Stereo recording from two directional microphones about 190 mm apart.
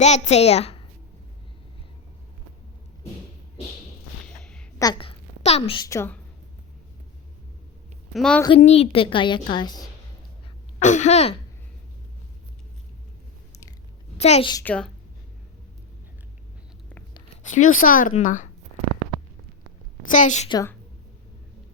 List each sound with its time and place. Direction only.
0.0 s a child's voice: 35° left (ahead or behind)
4.3 s a sound: 5° left (ahead or behind)
4.8 s a woman's voice: 25° left (ahead or behind)
8.1 s a woman's voice: centre (ahead or behind)
8.5 s a woman's voice: 30° left (ahead or behind)
10.8 s a child's voice: 40° left (ahead or behind)
14.2 s a woman's voice: 35° left (ahead or behind)
14.6 s a woman's voice: 5° left (ahead or behind)
17.4 s speech: 40° left (ahead or behind)
20.1 s a child's voice: 40° left (ahead or behind)
20.5 s a woman's voice: 20° left (ahead or behind)